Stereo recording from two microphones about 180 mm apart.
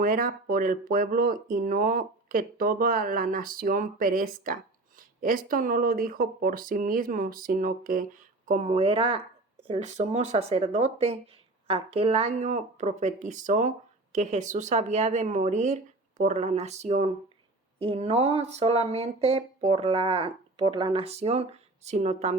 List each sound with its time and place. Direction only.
0.0 s speech: 50° right (ahead or behind)
8.4 s speech: 40° right (ahead or behind)